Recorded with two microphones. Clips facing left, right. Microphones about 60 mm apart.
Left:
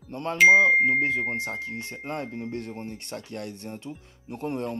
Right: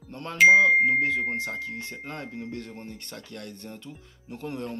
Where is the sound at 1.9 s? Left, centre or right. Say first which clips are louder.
Left 4 dB; centre.